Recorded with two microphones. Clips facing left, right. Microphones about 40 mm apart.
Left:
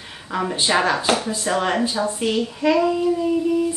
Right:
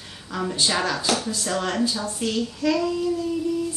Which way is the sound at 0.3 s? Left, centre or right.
Left.